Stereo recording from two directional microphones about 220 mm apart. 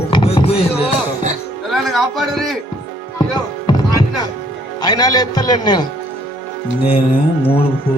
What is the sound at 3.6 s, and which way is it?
Music, 15° left (ahead or behind).